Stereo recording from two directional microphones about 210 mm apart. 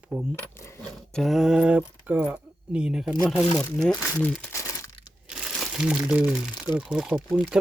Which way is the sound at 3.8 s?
5° left (ahead or behind).